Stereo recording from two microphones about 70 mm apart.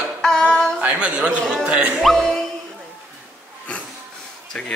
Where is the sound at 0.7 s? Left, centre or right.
Centre.